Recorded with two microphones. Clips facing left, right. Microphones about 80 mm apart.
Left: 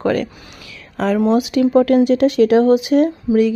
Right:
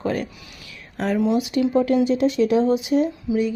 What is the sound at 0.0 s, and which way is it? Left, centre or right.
Speech, left.